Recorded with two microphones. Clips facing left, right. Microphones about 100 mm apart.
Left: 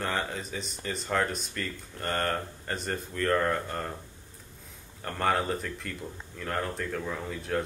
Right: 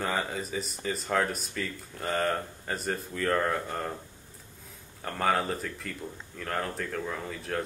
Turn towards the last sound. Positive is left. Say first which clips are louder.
# left 2 dB
turn(degrees=0)  # may be behind; listen again after turning